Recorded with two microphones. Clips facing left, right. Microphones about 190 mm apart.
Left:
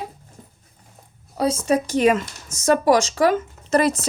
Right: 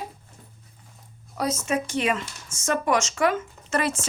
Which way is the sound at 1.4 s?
30° left (ahead or behind).